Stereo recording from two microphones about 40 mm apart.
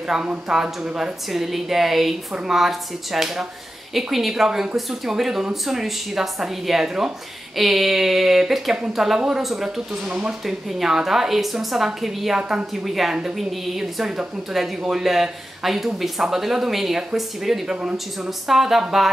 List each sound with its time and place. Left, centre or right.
0.5 s a woman's voice: centre
10.0 s speech: right
10.4 s a woman's voice: centre
12.4 s speech: right
12.8 s a woman's voice: centre